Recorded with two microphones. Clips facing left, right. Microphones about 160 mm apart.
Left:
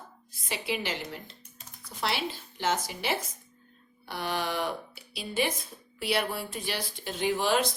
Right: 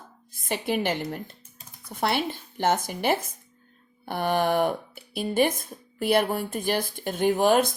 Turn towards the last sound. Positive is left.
turn(degrees=-50)  # may be behind; listen again after turning